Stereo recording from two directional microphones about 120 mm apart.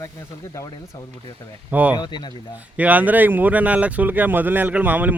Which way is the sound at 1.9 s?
40° left (ahead or behind).